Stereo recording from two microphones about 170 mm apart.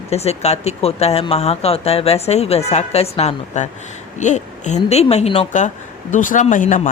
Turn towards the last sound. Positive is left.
turn(degrees=50)  # may be behind; listen again after turning